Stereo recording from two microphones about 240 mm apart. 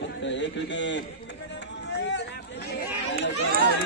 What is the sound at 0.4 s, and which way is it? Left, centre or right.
Speech, left.